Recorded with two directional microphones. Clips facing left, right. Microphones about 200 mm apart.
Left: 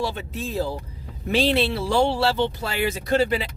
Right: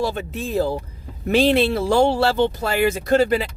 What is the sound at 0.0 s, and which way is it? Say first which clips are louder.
Speech: right 4 dB; 45° right (ahead or behind).